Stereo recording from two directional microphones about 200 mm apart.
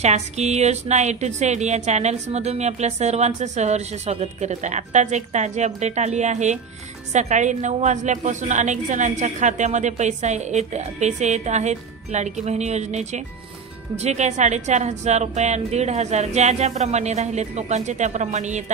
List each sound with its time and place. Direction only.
0.0 s speech: 35° right (ahead or behind)